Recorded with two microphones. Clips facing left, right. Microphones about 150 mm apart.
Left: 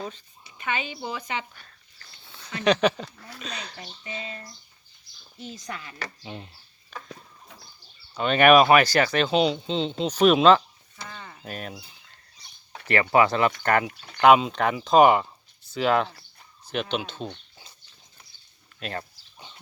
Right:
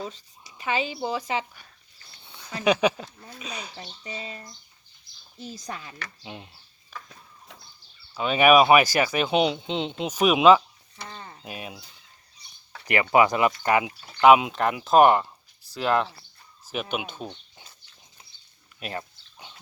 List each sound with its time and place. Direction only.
0.1 s speech: 35° right (ahead or behind)
2.6 s speech: 10° right (ahead or behind)
6.2 s speech: 5° right (ahead or behind)
8.1 s speech: 5° right (ahead or behind)
11.1 s a sound: 25° right (ahead or behind)
11.4 s speech: 5° right (ahead or behind)
12.8 s speech: 15° right (ahead or behind); by 16.1 s centre (ahead or behind)
17.0 s speech: 10° right (ahead or behind)
18.8 s dog: 10° right (ahead or behind)